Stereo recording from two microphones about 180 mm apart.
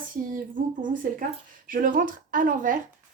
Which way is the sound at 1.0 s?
50° right (ahead or behind).